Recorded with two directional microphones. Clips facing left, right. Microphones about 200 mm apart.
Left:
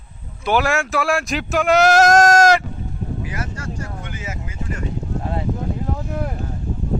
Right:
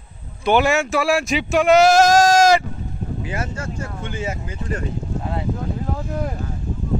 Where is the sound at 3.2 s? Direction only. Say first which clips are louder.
Right 2 dB; 25° right (ahead or behind).